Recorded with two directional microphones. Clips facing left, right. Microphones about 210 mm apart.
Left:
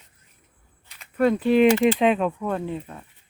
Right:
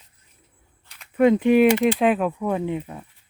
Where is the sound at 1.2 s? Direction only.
20° right (ahead or behind).